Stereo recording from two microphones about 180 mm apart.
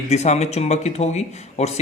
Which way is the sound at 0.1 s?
40° left (ahead or behind).